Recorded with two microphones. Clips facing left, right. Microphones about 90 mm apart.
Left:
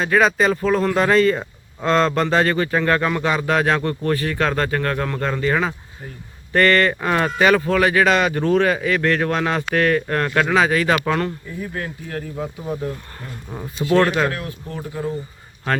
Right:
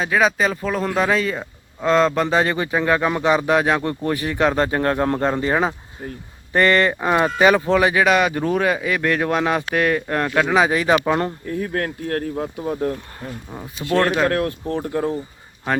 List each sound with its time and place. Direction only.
0.0 s speech: 5° right (ahead or behind); by 11.3 s 20° right (ahead or behind)
11.4 s speech: 55° right (ahead or behind)
13.5 s speech: centre (ahead or behind)
14.3 s speech: 50° right (ahead or behind)